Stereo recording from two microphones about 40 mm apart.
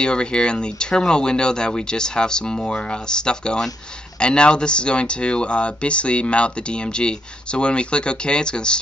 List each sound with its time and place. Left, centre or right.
0.0 s speech: left